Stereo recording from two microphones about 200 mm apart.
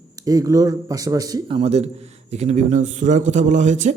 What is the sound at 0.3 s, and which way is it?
Speech, 15° right (ahead or behind).